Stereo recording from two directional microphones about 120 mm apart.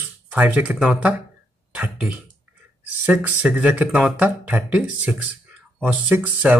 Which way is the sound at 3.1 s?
10° right (ahead or behind).